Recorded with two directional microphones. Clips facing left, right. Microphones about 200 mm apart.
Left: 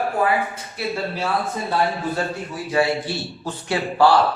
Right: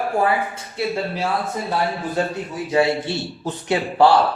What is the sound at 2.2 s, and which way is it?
A man's voice, 20° right (ahead or behind).